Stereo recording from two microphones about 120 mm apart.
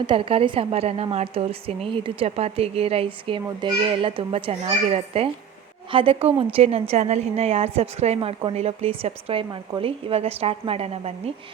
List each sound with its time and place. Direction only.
0.0 s a woman's voice: 45° right (ahead or behind)
9.5 s speech: 40° right (ahead or behind)
10.1 s a woman's voice: 55° right (ahead or behind)